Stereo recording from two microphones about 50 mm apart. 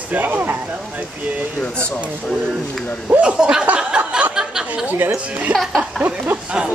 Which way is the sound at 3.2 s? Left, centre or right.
Centre.